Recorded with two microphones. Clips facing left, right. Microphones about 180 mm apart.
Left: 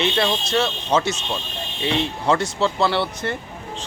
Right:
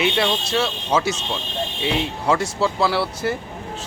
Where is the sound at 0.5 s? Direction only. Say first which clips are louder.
Left 2 dB; 5° right (ahead or behind).